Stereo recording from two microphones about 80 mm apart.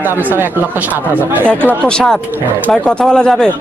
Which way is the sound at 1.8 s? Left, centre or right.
Centre.